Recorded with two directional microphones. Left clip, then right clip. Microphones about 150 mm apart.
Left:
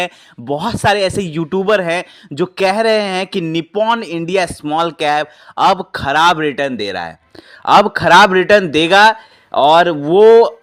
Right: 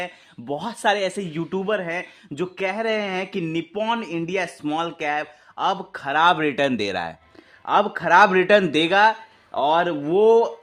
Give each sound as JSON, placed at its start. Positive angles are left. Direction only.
{"t": 0.0, "sound": "speech", "side_deg": 40}
{"t": 7.6, "sound": "speech", "side_deg": 50}